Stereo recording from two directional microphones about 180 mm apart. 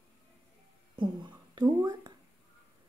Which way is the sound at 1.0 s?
25° right (ahead or behind).